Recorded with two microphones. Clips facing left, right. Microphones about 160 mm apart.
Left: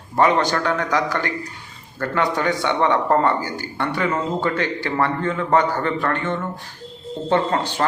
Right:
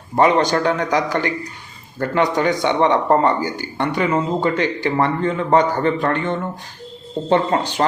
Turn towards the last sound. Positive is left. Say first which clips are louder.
# right 2 dB
turn(degrees=-20)  # may be behind; listen again after turning